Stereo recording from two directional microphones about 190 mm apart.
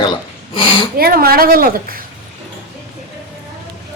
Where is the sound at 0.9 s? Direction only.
50° right (ahead or behind).